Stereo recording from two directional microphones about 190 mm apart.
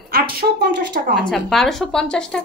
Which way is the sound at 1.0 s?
50° right (ahead or behind).